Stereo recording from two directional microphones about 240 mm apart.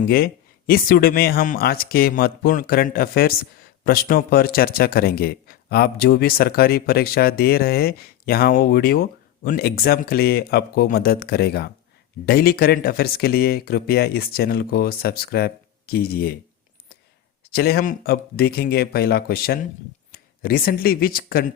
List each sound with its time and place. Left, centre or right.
0.0 s speech: left
17.5 s speech: left